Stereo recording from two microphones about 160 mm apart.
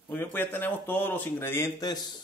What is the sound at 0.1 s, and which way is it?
Speech, 10° left (ahead or behind).